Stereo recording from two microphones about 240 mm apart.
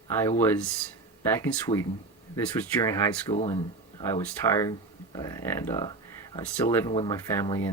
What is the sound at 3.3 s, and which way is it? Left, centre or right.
Speech, left.